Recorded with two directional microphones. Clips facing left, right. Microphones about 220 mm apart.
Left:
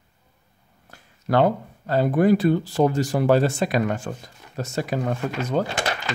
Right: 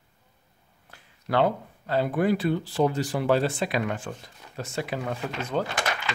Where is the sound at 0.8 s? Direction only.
45° left (ahead or behind).